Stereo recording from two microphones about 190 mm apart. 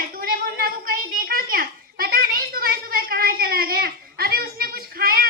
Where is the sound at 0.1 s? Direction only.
50° right (ahead or behind).